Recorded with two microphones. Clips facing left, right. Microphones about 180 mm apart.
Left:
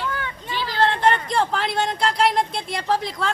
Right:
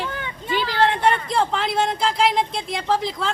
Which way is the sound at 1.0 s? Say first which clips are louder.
Even; centre (ahead or behind).